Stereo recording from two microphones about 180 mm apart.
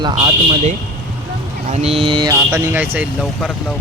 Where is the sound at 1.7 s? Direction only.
35° right (ahead or behind); by 3.0 s 10° right (ahead or behind).